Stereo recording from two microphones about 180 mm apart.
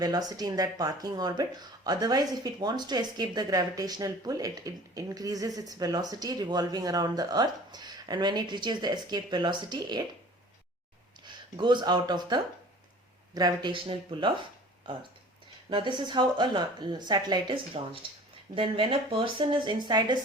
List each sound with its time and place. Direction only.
0.0 s speech: 20° right (ahead or behind)
11.5 s speech: 25° right (ahead or behind)
17.7 s speech: 35° right (ahead or behind)